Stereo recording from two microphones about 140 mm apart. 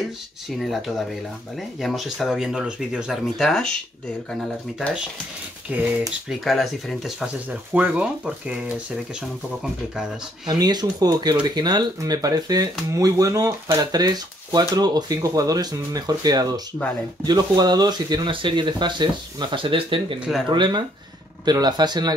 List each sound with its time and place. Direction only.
0.6 s speech: centre (ahead or behind)
10.4 s speech: 30° right (ahead or behind)